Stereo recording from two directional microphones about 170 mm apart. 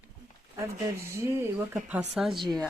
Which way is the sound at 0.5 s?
15° right (ahead or behind).